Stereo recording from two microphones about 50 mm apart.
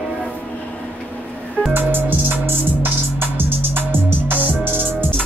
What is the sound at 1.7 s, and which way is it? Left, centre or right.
Music, right.